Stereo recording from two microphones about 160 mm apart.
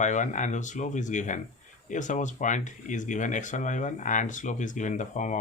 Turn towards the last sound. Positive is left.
turn(degrees=50)  # may be behind; listen again after turning